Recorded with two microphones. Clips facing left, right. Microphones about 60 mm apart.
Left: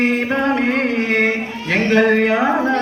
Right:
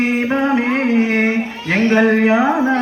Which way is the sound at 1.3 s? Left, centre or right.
Centre.